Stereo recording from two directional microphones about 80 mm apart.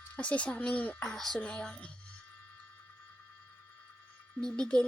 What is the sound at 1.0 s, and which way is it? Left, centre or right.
Speech, centre.